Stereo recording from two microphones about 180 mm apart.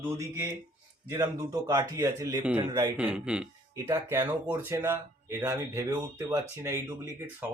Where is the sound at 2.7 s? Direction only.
20° right (ahead or behind).